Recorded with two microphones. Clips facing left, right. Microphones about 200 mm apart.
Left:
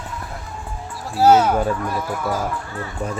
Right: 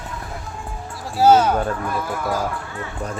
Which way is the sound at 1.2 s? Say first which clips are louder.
Even; 5° left (ahead or behind).